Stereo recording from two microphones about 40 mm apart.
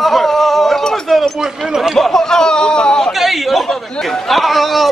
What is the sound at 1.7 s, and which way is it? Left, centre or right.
Speech, centre.